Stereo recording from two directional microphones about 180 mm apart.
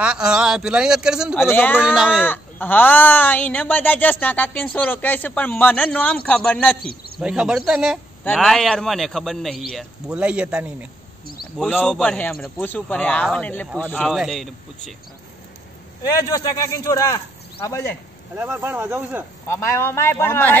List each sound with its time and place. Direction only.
0.0 s a man's voice: 5° right (ahead or behind)
1.5 s speech: 10° left (ahead or behind)
1.8 s a man's voice: 5° right (ahead or behind)
2.2 s a man's voice: 10° left (ahead or behind)
16.3 s speech: 20° left (ahead or behind)
18.4 s speech: 10° right (ahead or behind)
19.4 s speech: 15° left (ahead or behind)